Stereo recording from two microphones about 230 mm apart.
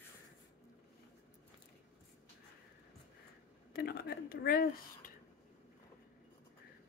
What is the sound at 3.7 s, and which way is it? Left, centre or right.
Speech, left.